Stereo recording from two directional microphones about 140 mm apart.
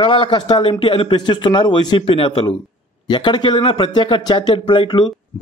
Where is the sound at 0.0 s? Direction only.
35° left (ahead or behind).